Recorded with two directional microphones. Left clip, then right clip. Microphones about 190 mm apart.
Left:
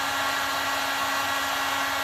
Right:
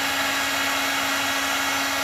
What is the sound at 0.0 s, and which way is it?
Hair dryer, 20° right (ahead or behind).